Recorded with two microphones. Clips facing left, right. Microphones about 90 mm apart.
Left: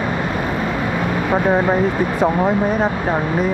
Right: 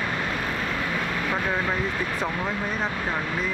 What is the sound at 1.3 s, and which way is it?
Speech, 35° left (ahead or behind).